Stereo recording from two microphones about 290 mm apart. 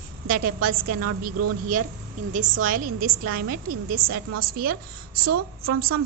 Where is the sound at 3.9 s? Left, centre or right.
Right.